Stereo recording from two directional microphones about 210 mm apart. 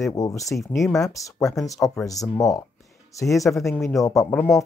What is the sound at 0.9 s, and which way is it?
Speech, 15° left (ahead or behind).